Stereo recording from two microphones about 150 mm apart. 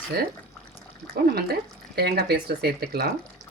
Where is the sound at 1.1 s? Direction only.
90° right.